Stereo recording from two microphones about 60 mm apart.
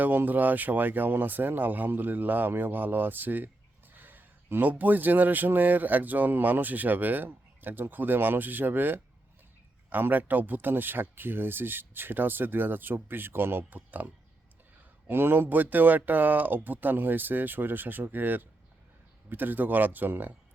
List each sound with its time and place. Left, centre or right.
0.0 s speech: right